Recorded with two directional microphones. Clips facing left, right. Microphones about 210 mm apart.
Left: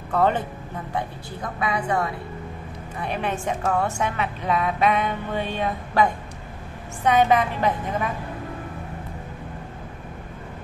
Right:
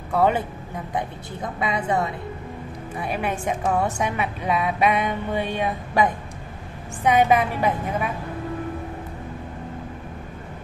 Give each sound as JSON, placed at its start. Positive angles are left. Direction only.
{"t": 0.1, "sound": "speech", "side_deg": -10}
{"t": 0.9, "sound": "a woman's voice", "side_deg": -20}
{"t": 3.0, "sound": "a woman's voice", "side_deg": -10}